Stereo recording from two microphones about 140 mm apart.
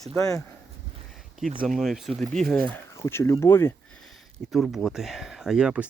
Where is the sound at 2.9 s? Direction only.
20° left (ahead or behind).